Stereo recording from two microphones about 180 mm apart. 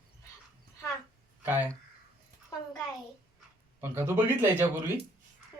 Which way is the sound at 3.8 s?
15° right (ahead or behind).